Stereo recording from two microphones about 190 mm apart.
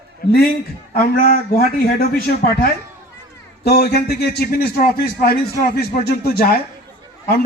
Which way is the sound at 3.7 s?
55° left (ahead or behind).